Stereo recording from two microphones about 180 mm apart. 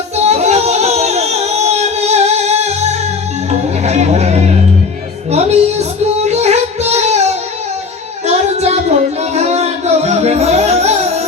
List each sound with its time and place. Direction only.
0.2 s music: 35° right (ahead or behind)
8.3 s child singing: 35° right (ahead or behind)
9.3 s music: 35° right (ahead or behind)